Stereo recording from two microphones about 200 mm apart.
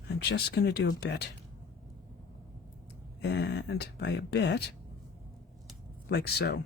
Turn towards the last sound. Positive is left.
turn(degrees=55)  # may be behind; listen again after turning